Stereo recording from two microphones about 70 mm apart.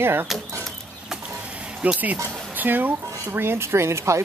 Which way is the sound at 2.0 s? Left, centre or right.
Right.